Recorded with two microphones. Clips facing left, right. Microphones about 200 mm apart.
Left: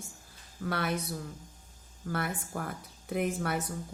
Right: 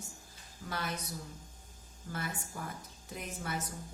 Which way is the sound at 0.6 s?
65° left (ahead or behind).